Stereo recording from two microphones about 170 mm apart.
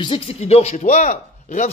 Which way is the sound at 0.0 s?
35° left (ahead or behind).